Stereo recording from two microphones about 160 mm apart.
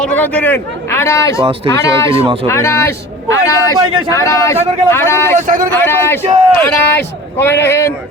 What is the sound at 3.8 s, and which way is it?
Speech, 30° right (ahead or behind).